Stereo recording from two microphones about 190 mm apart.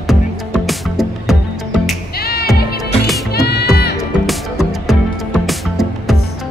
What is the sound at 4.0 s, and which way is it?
Music, centre (ahead or behind).